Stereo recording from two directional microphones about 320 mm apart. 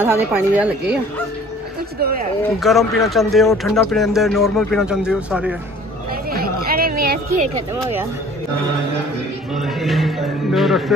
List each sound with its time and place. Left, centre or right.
0.0 s speech: centre
2.6 s speech: centre
6.3 s a sound: right
9.5 s speech: centre